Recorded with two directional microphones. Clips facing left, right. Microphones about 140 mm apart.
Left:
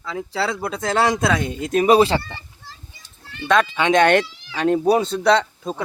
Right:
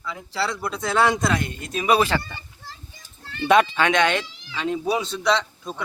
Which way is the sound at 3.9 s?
60° left (ahead or behind).